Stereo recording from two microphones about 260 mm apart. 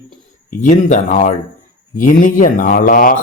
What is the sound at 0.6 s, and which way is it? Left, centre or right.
Speech, left.